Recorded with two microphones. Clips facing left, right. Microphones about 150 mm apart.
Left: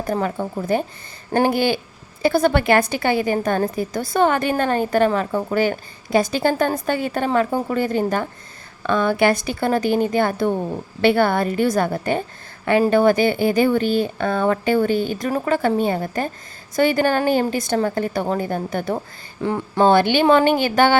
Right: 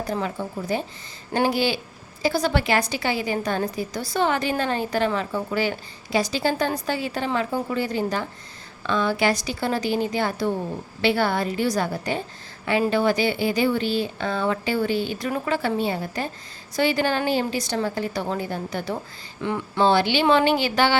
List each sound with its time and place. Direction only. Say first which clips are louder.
0.0 s a woman's voice: left 4 dB; 50° left (ahead or behind)
19.4 s a woman's voice: left 4 dB; 40° left (ahead or behind)